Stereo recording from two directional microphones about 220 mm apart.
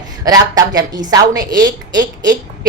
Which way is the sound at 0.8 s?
20° right (ahead or behind).